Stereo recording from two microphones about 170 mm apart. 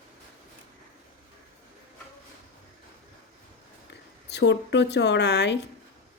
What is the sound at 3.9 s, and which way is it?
Speech, 90° left.